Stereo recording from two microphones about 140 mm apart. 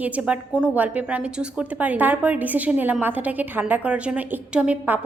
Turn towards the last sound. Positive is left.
turn(degrees=-10)  # may be behind; listen again after turning